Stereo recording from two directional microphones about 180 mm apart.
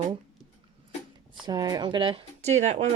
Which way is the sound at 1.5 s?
20° right (ahead or behind).